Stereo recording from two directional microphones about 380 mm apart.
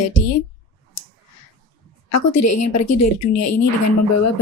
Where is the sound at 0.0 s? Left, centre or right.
Left.